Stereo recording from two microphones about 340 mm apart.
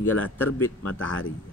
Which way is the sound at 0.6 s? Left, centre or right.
Left.